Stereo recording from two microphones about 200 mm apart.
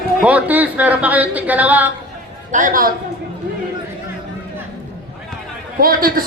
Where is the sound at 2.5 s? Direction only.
40° right (ahead or behind).